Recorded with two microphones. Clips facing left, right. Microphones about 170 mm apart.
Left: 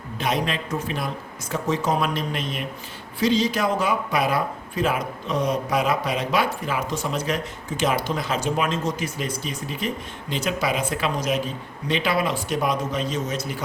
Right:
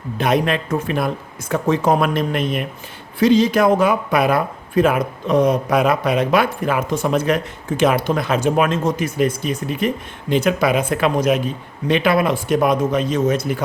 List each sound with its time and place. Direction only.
0.2 s speech: 55° right (ahead or behind)